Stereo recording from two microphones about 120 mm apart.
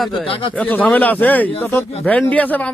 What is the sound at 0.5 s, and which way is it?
A man's voice, 15° left (ahead or behind).